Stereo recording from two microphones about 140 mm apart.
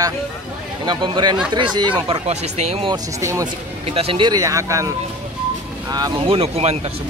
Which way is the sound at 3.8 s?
45° right (ahead or behind).